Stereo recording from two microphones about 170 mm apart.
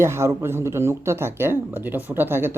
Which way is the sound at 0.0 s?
15° right (ahead or behind).